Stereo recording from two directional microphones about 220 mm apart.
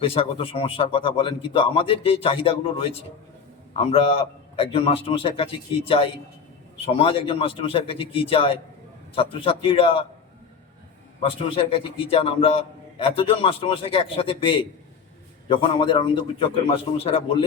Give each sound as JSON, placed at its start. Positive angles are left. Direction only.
{"t": 0.0, "sound": "a man's voice", "side_deg": 25}
{"t": 11.2, "sound": "a man's voice", "side_deg": 25}